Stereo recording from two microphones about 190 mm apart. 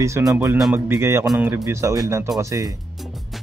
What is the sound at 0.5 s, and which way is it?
Speech, centre (ahead or behind).